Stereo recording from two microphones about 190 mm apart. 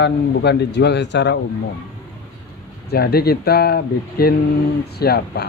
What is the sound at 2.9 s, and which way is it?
A man's voice, 55° left (ahead or behind).